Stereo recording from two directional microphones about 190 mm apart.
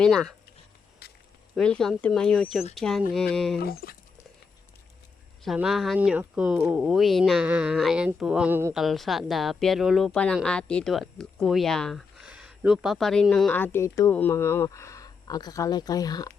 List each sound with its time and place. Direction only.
0.0 s speech: 5° left (ahead or behind)
1.5 s speech: 5° left (ahead or behind)
3.6 s speech: 55° left (ahead or behind)
5.5 s speech: centre (ahead or behind); by 16.3 s 20° left (ahead or behind)